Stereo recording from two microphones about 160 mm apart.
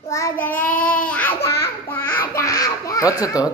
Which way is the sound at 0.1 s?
15° left (ahead or behind).